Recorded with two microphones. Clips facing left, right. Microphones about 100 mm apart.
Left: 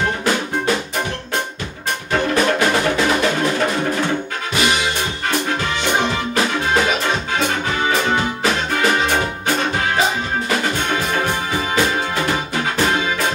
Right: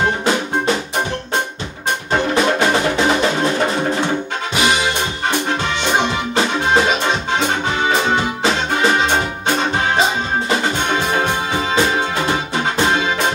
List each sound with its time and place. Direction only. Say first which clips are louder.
2.1 s music: right 1 dB; 25° right (ahead or behind)
5.9 s music: right 2 dB; 25° right (ahead or behind)